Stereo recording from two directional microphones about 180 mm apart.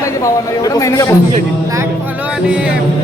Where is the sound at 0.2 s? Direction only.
20° left (ahead or behind).